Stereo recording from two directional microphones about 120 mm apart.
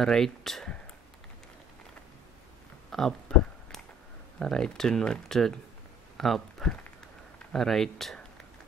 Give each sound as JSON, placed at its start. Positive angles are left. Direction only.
{"t": 0.0, "sound": "speech", "side_deg": 5}
{"t": 2.9, "sound": "a sound", "side_deg": 5}
{"t": 4.4, "sound": "speech", "side_deg": 5}